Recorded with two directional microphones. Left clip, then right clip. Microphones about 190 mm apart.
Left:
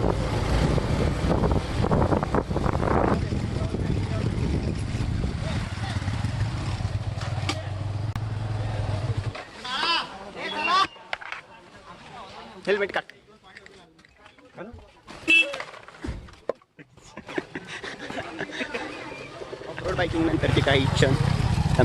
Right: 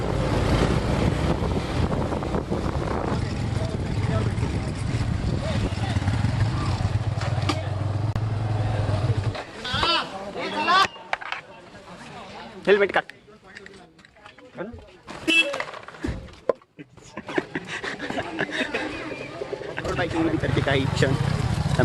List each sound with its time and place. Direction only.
0.0 s vehicle: centre (ahead or behind)
12.6 s a man's voice: 5° right (ahead or behind)
14.6 s a sound: centre (ahead or behind)
15.1 s vehicle: centre (ahead or behind)
17.2 s chuckle: centre (ahead or behind)
20.9 s speech: 10° left (ahead or behind)
21.5 s boat: 20° right (ahead or behind)